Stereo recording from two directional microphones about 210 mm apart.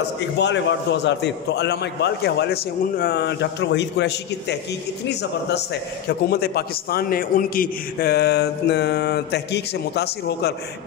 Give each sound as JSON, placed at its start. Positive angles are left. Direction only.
{"t": 0.4, "sound": "a man's voice", "side_deg": 55}
{"t": 6.0, "sound": "a man's voice", "side_deg": 50}